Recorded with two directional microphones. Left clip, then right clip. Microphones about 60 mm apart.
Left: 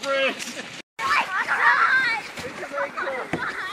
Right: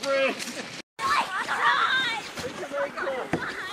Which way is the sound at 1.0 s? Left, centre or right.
Left.